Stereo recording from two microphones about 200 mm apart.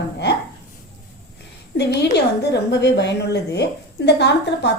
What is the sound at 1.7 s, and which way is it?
A woman's voice, 55° left (ahead or behind).